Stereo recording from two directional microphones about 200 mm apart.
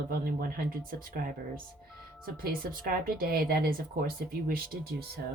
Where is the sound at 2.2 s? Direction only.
45° right (ahead or behind).